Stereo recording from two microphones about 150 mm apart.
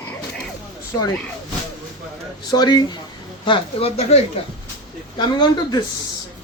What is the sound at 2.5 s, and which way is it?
Speech, 25° left (ahead or behind).